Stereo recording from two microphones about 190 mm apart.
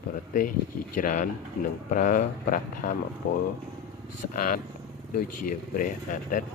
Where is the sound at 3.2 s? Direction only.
70° left (ahead or behind).